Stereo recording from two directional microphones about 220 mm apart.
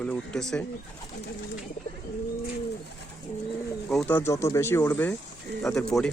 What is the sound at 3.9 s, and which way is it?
Speech, 5° left (ahead or behind).